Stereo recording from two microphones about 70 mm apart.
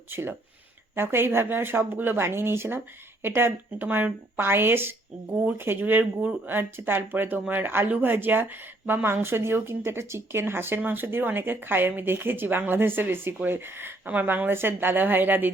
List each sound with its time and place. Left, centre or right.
0.1 s speech: right